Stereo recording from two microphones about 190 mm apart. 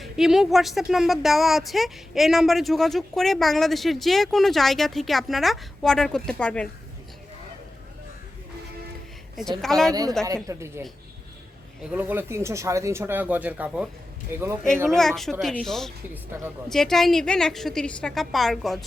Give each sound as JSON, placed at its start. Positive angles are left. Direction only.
{"t": 0.0, "sound": "speech", "side_deg": 0}
{"t": 9.3, "sound": "speech", "side_deg": 0}
{"t": 9.9, "sound": "a woman's voice", "side_deg": -20}
{"t": 14.8, "sound": "speech", "side_deg": 0}